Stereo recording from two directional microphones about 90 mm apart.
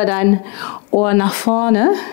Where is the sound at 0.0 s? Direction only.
15° left (ahead or behind).